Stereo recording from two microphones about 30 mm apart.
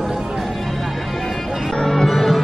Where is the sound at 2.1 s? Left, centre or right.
Centre.